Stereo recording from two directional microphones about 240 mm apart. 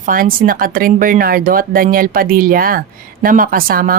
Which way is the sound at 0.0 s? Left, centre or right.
Right.